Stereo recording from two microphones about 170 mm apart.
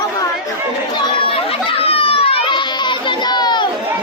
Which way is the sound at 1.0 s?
30° left (ahead or behind).